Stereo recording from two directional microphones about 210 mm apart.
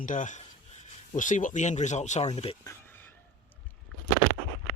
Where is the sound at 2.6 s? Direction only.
10° left (ahead or behind).